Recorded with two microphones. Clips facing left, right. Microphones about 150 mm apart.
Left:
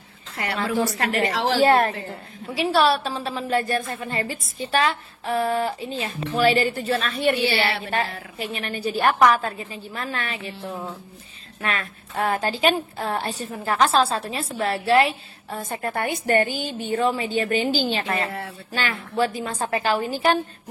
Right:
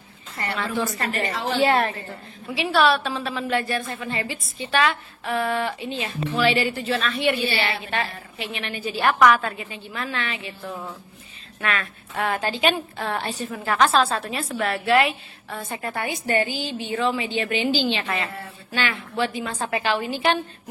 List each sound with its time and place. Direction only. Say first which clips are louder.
0.4 s a woman's voice: left 3 dB; 85° left
1.6 s a woman's voice: left 2 dB; 40° left (ahead or behind)
8.4 s a woman's voice: left 2 dB; 40° left (ahead or behind)
15.7 s a woman's voice: left 3 dB; 50° left (ahead or behind)